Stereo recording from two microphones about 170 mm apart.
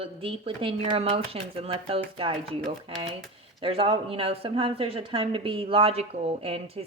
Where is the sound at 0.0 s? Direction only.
35° right (ahead or behind).